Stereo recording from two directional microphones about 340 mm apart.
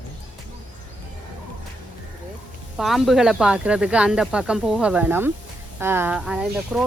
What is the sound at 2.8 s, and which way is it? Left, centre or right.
Speech, centre.